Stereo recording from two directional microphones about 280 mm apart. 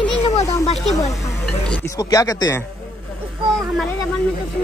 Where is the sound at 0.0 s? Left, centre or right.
Centre.